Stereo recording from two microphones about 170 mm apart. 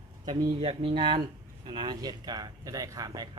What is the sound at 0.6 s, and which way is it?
Speech, 35° right (ahead or behind).